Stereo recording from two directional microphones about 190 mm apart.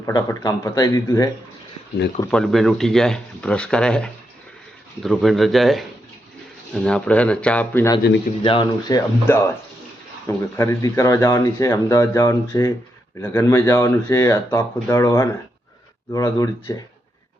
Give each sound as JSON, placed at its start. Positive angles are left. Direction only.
{"t": 0.0, "sound": "speech", "side_deg": 15}
{"t": 2.3, "sound": "speech", "side_deg": 0}
{"t": 8.4, "sound": "speech", "side_deg": 25}